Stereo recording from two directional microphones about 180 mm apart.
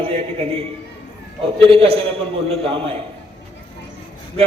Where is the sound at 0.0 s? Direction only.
30° right (ahead or behind).